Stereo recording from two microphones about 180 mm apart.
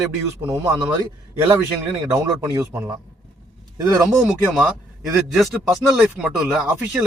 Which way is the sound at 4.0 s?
5° right (ahead or behind).